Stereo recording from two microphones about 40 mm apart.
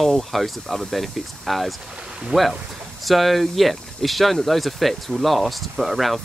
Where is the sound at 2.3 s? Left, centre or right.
Right.